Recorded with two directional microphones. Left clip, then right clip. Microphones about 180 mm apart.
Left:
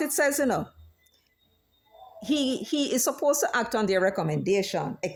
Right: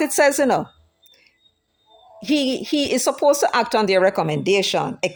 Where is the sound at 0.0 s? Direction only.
25° right (ahead or behind).